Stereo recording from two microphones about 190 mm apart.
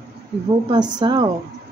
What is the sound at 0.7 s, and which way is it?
Speech, 20° right (ahead or behind).